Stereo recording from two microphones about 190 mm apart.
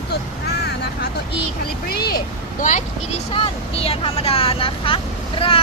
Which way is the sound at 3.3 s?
30° left (ahead or behind).